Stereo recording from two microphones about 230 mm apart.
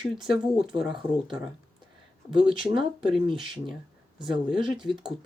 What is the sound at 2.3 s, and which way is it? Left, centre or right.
Speech, right.